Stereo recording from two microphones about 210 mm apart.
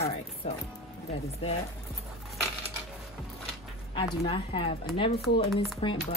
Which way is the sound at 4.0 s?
25° left (ahead or behind).